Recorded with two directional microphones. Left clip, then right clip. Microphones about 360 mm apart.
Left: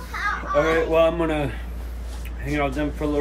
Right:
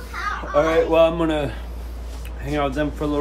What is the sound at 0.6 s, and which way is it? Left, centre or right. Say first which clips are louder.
Speech: right 3 dB; centre.